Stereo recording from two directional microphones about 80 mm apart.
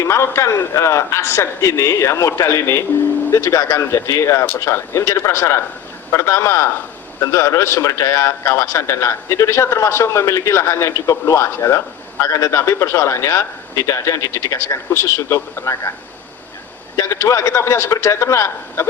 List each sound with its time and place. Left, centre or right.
0.0 s a man's voice: left
17.0 s a man's voice: left